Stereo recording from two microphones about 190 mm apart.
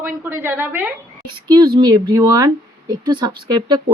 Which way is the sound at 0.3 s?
10° right (ahead or behind).